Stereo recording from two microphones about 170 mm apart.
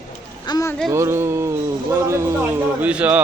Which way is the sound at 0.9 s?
15° right (ahead or behind).